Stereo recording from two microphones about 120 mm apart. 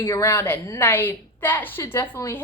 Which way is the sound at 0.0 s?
20° left (ahead or behind).